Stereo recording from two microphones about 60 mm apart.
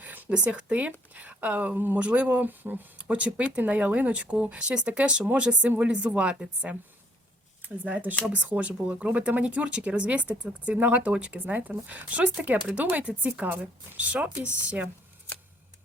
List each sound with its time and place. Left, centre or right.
0.0 s a sound: right
0.3 s speech: centre; by 2.0 s right
2.0 s speech: right